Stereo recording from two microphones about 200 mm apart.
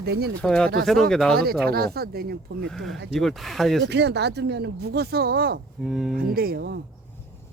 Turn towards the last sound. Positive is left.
turn(degrees=-55)  # may be behind; listen again after turning